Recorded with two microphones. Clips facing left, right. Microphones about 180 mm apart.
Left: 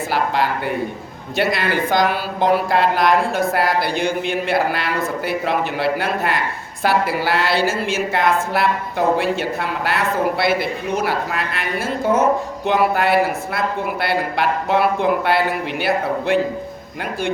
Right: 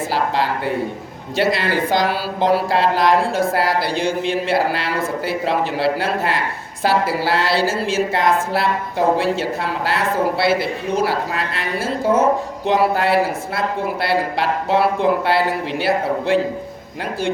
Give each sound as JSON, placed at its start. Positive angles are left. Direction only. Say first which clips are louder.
{"t": 0.1, "sound": "a woman's voice", "louder": "left 1 dB", "side_deg": -30}